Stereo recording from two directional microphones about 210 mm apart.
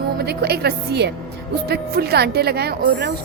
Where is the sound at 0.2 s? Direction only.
50° right (ahead or behind).